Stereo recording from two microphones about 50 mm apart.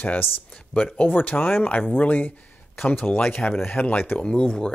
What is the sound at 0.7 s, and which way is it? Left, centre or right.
Speech, left.